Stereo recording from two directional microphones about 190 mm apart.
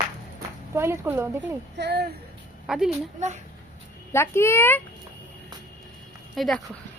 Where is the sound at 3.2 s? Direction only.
40° right (ahead or behind).